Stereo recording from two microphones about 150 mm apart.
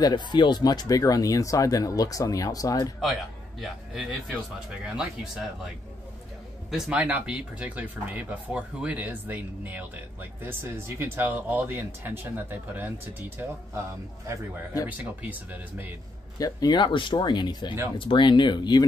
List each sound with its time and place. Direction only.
0.0 s speech: 30° left (ahead or behind)
3.6 s speech: centre (ahead or behind)
6.7 s speech: 5° right (ahead or behind)
16.3 s speech: 25° left (ahead or behind)